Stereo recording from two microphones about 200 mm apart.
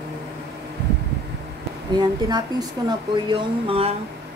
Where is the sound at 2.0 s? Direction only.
20° right (ahead or behind).